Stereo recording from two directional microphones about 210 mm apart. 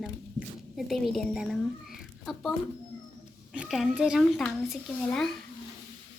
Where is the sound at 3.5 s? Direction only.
5° right (ahead or behind).